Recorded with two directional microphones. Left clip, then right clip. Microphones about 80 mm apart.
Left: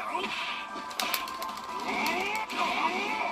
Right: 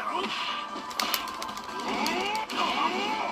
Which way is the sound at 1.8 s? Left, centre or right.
Right.